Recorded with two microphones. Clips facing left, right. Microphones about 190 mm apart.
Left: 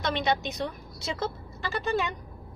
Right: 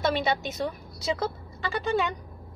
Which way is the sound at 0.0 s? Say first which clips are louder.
Right 2 dB; 5° right (ahead or behind).